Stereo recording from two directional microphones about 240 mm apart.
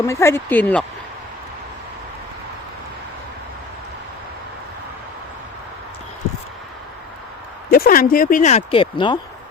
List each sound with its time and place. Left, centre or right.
0.0 s speech: centre
7.7 s speech: left